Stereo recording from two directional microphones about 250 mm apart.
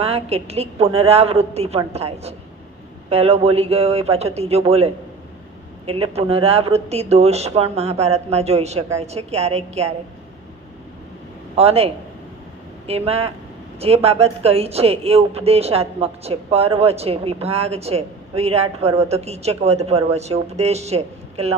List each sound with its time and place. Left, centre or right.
0.0 s speech: right
11.5 s speech: right
12.9 s speech: right